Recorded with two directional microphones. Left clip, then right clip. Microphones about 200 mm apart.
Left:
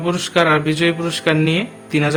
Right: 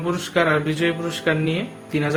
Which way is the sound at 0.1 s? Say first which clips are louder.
Left 4 dB; 30° left (ahead or behind).